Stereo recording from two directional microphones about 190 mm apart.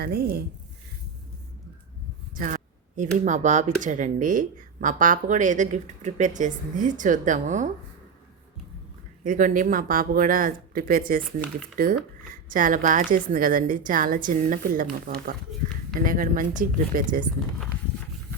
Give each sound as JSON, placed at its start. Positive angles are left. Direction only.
{"t": 0.0, "sound": "speech", "side_deg": -55}
{"t": 2.3, "sound": "speech", "side_deg": -45}
{"t": 9.2, "sound": "speech", "side_deg": -45}